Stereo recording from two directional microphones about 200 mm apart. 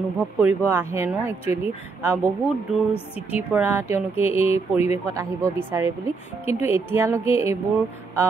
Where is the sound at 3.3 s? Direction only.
10° right (ahead or behind).